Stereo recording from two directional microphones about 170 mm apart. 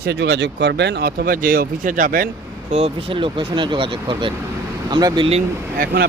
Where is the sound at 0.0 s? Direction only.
80° right; by 2.2 s 55° right (ahead or behind).